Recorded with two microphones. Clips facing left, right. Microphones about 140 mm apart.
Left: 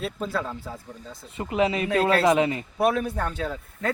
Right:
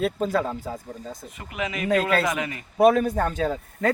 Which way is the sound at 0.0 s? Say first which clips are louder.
Right 5 dB; 45° right (ahead or behind).